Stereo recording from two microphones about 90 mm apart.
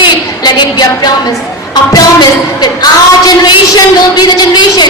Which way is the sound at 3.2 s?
50° left (ahead or behind).